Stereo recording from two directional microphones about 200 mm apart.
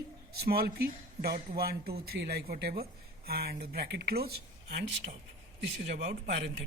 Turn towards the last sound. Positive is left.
turn(degrees=-55)  # may be behind; listen again after turning